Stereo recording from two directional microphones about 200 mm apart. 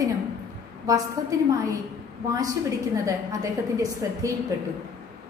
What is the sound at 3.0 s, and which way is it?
A woman's voice, 15° right (ahead or behind).